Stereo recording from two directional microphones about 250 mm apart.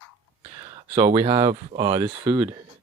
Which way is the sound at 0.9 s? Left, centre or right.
Centre.